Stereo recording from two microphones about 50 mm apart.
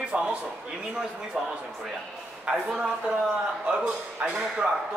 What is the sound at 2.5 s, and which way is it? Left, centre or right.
A man's voice, centre.